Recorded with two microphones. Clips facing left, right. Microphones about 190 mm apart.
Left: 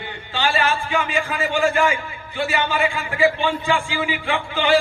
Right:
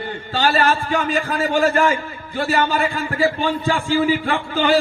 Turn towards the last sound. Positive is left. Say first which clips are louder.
# right 1 dB
turn(degrees=-40)  # may be behind; listen again after turning